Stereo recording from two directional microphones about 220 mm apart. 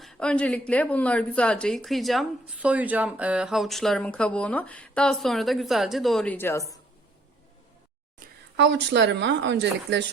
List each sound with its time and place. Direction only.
0.0 s speech: 5° left (ahead or behind)
8.2 s a sound: 40° right (ahead or behind)
8.5 s a woman's voice: 55° right (ahead or behind)